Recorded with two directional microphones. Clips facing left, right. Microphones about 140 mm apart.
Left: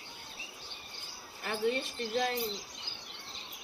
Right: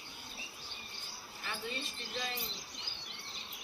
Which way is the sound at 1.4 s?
55° left (ahead or behind).